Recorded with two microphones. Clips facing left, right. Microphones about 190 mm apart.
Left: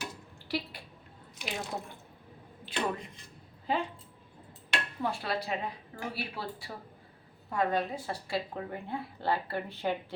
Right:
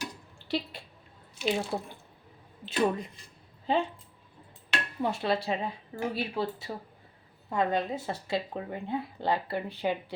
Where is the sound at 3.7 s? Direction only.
25° right (ahead or behind).